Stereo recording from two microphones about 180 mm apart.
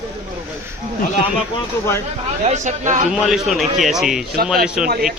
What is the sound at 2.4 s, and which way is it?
Speech, 40° right (ahead or behind).